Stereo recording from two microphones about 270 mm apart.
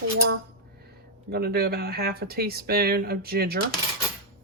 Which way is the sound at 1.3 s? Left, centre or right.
Right.